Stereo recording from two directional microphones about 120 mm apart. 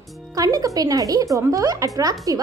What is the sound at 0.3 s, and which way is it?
Speech, 30° right (ahead or behind).